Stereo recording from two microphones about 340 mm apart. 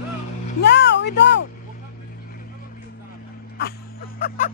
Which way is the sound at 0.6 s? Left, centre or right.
Left.